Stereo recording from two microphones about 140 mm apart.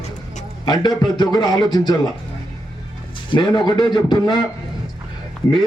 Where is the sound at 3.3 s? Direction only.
30° left (ahead or behind).